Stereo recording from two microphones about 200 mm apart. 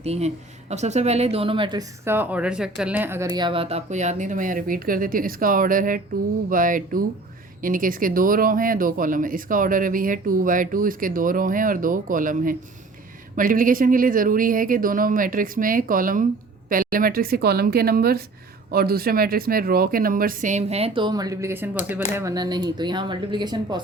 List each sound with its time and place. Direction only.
0.0 s speech: 30° right (ahead or behind)
2.0 s speech: 10° right (ahead or behind)